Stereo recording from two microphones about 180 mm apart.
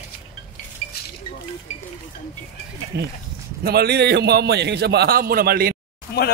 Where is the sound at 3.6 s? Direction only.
60° right (ahead or behind).